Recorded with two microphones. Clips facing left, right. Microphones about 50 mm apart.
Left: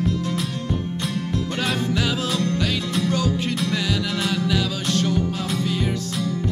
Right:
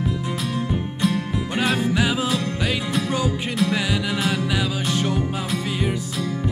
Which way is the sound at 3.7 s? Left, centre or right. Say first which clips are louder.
Right 1 dB; centre.